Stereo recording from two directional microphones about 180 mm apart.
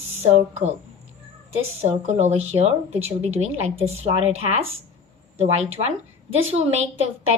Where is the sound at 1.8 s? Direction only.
40° right (ahead or behind).